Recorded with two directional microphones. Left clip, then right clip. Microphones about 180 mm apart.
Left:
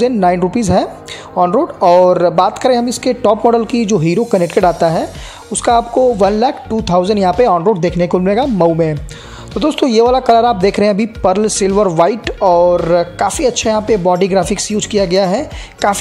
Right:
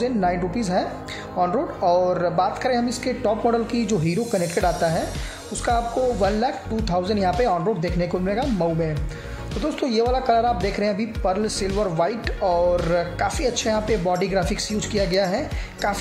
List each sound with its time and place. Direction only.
0.0 s speech: 35° left (ahead or behind)